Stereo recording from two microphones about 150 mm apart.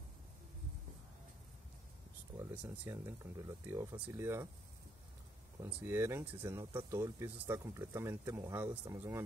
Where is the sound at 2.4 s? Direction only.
20° right (ahead or behind).